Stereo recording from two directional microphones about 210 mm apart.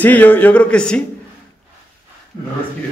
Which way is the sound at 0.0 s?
10° left (ahead or behind).